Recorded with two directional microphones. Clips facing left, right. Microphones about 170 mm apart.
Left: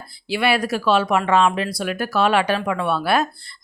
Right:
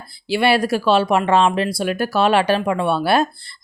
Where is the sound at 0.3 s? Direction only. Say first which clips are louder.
Right 3 dB; 30° right (ahead or behind).